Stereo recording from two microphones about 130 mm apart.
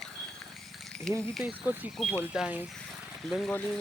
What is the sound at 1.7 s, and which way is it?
Speech, 15° right (ahead or behind).